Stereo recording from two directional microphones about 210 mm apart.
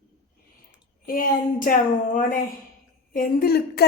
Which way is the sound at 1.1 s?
40° left (ahead or behind).